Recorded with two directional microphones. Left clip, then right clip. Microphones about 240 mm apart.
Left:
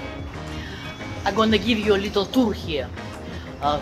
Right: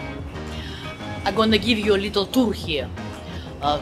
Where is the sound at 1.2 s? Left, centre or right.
Centre.